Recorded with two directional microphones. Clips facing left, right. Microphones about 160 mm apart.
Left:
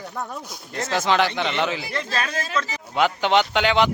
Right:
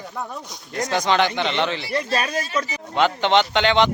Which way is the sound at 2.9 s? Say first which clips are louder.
Right 1 dB; 10° left (ahead or behind).